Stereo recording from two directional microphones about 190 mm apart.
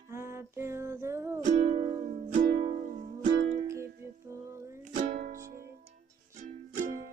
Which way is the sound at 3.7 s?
15° right (ahead or behind).